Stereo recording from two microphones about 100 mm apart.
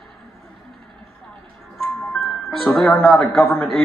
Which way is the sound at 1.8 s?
Centre (ahead or behind).